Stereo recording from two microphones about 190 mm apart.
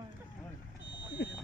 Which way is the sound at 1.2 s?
60° left (ahead or behind).